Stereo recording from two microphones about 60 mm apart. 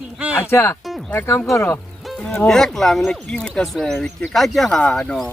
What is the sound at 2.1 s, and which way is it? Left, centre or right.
Music, centre.